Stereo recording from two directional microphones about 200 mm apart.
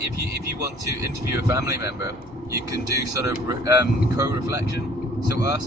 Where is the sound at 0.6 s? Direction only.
15° right (ahead or behind).